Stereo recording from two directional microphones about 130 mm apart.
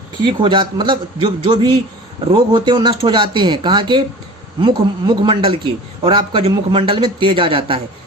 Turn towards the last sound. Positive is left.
turn(degrees=-40)  # may be behind; listen again after turning